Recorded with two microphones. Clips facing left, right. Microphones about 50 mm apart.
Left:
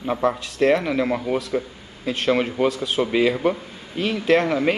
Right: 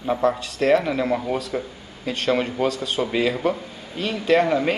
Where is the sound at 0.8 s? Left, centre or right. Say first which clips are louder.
Even; centre.